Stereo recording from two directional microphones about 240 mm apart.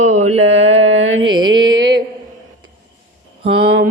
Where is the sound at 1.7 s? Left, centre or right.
Right.